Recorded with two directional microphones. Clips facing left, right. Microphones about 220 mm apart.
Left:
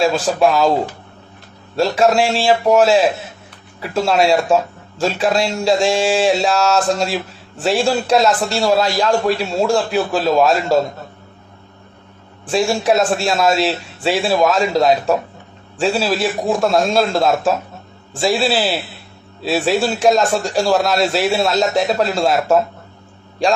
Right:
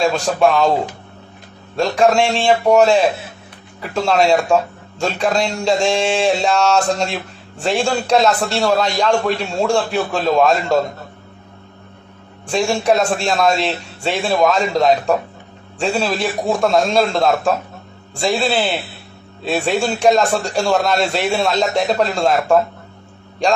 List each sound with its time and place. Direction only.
0.0 s speech: centre (ahead or behind)
12.5 s speech: centre (ahead or behind)